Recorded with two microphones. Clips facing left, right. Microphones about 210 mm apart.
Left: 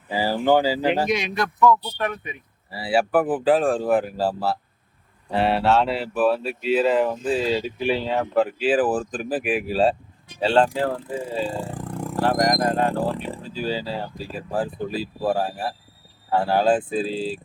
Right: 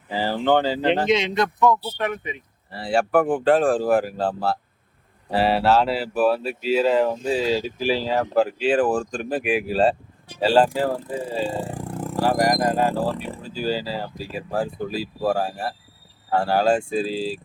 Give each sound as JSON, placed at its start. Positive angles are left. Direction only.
{"t": 0.1, "sound": "speech", "side_deg": 10}
{"t": 1.0, "sound": "speech", "side_deg": -25}
{"t": 2.7, "sound": "speech", "side_deg": 5}
{"t": 11.5, "sound": "speech", "side_deg": -15}